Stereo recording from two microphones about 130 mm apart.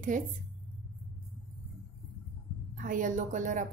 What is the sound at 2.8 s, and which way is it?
Speech, 90° right.